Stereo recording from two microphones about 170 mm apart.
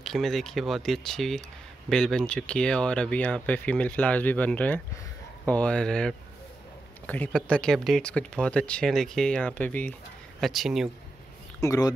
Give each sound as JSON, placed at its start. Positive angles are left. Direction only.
{"t": 0.0, "sound": "speech", "side_deg": 0}
{"t": 11.6, "sound": "speech", "side_deg": 20}